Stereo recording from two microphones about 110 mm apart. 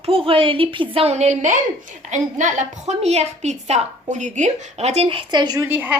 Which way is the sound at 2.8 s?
75° right (ahead or behind).